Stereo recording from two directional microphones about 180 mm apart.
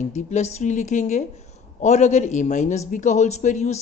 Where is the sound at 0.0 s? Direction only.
40° left (ahead or behind).